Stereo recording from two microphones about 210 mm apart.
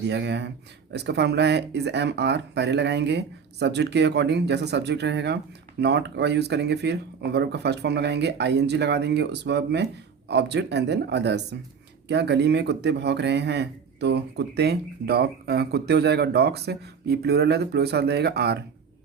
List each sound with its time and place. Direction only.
0.1 s speech: 55° right (ahead or behind)